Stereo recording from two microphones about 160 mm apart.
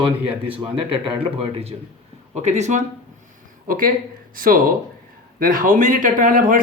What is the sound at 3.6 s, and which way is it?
A man's voice, 60° right (ahead or behind).